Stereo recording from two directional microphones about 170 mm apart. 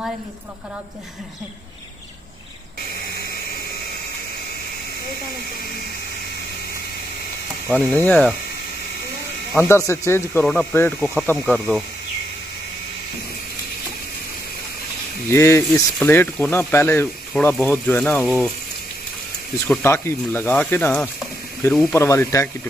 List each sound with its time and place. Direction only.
7.7 s speech: centre (ahead or behind)
9.6 s speech: 15° left (ahead or behind)
10.4 s speech: 5° left (ahead or behind)
15.2 s speech: 15° left (ahead or behind)
19.7 s speech: 15° left (ahead or behind)